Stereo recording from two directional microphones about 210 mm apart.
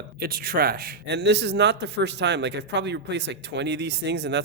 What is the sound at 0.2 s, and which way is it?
A man's voice, 45° right (ahead or behind).